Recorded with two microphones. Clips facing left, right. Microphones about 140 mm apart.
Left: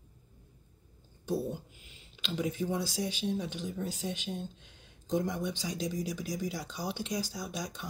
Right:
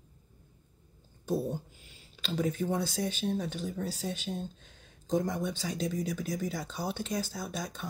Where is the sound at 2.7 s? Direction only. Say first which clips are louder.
Right 2 dB; 10° left (ahead or behind).